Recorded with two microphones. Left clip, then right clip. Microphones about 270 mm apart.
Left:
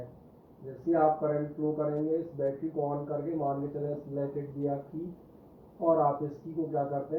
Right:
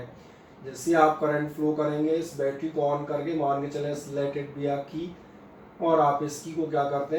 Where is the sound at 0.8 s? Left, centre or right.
Centre.